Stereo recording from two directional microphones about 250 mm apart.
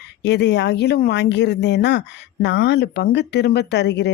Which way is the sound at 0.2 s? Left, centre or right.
Left.